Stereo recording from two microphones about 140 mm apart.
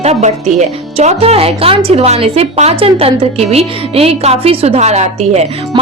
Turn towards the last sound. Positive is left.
turn(degrees=-50)  # may be behind; listen again after turning